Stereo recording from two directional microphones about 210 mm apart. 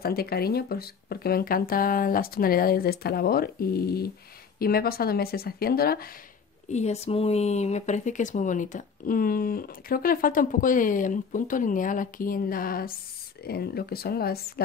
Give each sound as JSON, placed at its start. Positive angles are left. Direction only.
{"t": 0.0, "sound": "speech", "side_deg": 45}
{"t": 6.7, "sound": "speech", "side_deg": 30}